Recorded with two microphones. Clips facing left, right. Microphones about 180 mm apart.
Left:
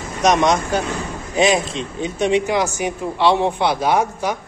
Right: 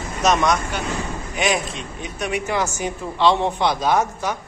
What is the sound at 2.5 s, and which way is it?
Speech, 15° left (ahead or behind).